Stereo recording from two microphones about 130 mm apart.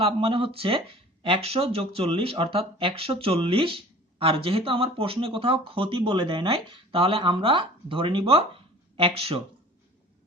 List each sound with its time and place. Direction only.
0.0 s speech: 45° right (ahead or behind)